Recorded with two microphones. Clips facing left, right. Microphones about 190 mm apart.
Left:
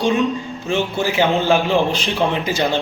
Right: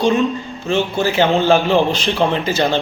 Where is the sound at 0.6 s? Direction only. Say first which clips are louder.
Right 3 dB; 15° left (ahead or behind).